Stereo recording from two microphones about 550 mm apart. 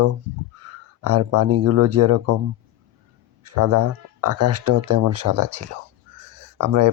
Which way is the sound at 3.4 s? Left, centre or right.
Right.